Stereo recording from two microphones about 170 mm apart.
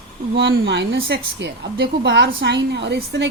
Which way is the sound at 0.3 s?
85° right.